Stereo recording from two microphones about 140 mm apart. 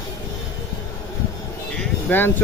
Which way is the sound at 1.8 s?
15° left (ahead or behind).